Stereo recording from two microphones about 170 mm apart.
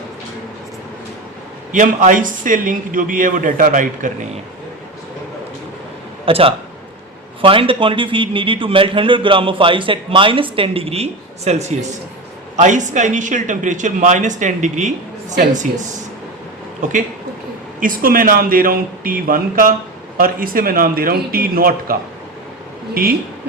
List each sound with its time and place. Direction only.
1.7 s speech: 50° right (ahead or behind)
6.2 s a man's voice: 35° right (ahead or behind)
17.7 s a man's voice: 55° right (ahead or behind)